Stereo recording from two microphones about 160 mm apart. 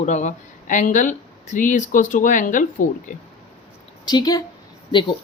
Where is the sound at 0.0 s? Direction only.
45° left (ahead or behind).